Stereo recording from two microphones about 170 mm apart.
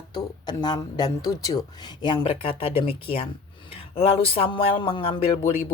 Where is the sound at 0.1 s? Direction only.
25° left (ahead or behind).